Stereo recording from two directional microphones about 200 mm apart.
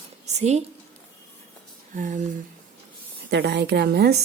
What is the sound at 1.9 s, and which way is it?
Speech, 40° right (ahead or behind).